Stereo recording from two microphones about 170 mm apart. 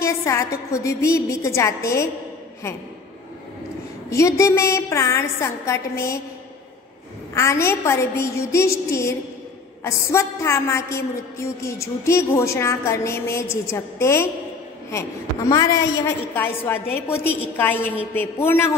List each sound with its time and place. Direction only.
0.0 s a woman's voice: 15° left (ahead or behind)
4.1 s a woman's voice: 15° left (ahead or behind)
7.3 s a woman's voice: 15° left (ahead or behind)